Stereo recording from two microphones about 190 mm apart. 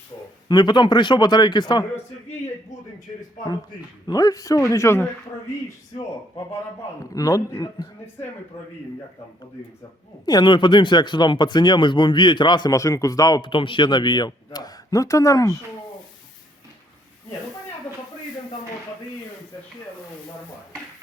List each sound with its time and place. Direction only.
0.4 s speech: 25° left (ahead or behind)
4.0 s a man's voice: 20° left (ahead or behind)
7.0 s a man's voice: 20° left (ahead or behind)
10.2 s speech: 25° left (ahead or behind)